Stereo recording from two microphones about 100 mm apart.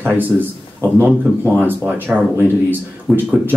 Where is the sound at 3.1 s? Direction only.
Centre (ahead or behind).